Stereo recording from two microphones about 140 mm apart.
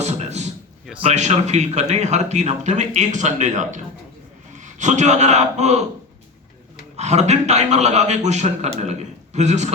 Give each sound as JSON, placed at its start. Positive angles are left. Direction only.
{"t": 0.0, "sound": "a sound", "side_deg": -50}
{"t": 1.0, "sound": "a man's voice", "side_deg": -55}
{"t": 6.9, "sound": "a man's voice", "side_deg": -55}